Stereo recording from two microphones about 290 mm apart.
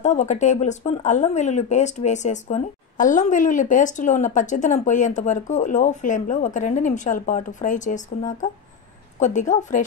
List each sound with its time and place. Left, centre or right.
0.0 s speech: left